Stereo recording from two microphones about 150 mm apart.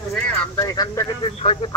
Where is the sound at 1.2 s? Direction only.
40° left (ahead or behind).